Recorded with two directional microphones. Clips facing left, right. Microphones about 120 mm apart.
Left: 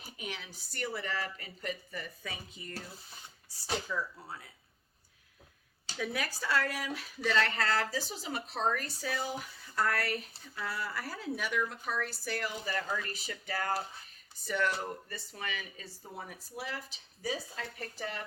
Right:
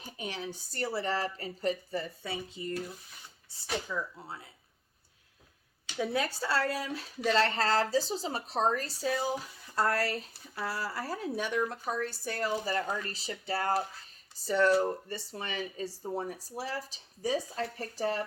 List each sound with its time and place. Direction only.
0.2 s speech: 35° right (ahead or behind)
3.8 s speech: 20° right (ahead or behind)
6.0 s speech: 25° right (ahead or behind)